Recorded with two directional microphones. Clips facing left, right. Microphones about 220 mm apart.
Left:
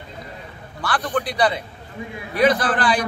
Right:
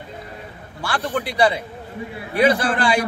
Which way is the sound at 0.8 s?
25° right (ahead or behind).